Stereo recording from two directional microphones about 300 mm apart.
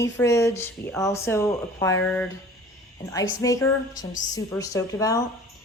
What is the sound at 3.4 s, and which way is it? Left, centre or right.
A woman's voice, centre.